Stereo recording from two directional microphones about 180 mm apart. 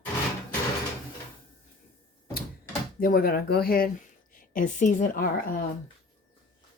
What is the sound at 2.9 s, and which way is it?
A woman's voice, 55° left (ahead or behind).